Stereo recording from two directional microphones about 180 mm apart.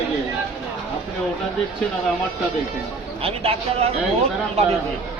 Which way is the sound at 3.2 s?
30° right (ahead or behind).